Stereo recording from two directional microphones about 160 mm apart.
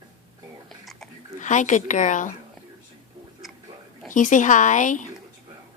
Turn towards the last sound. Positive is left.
turn(degrees=50)  # may be behind; listen again after turning